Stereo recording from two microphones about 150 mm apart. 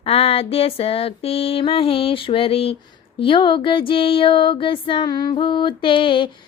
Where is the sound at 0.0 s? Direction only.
40° left (ahead or behind).